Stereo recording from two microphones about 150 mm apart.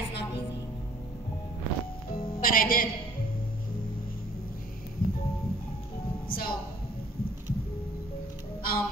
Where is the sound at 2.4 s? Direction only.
70° left (ahead or behind).